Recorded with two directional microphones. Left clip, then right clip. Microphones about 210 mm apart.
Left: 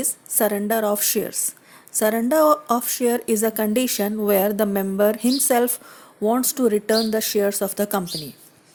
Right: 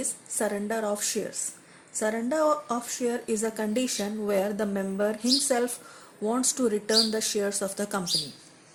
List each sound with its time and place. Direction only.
0.0 s speech: 50° left (ahead or behind)